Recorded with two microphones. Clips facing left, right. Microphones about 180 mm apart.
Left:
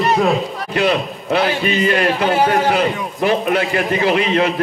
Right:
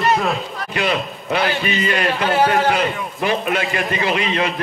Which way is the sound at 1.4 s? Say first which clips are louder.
Left 4 dB; 15° left (ahead or behind).